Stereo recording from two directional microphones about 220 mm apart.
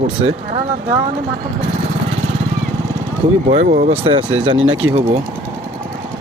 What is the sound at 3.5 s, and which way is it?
Speech, 30° right (ahead or behind).